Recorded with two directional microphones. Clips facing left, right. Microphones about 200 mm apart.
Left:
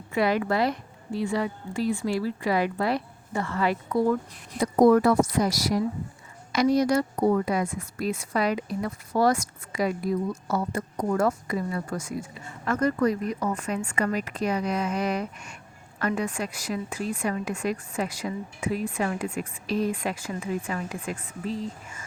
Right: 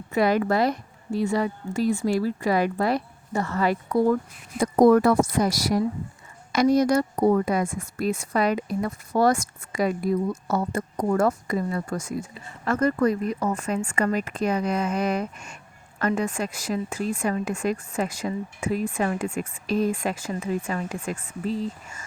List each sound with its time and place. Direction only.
0.1 s speech: 45° right (ahead or behind)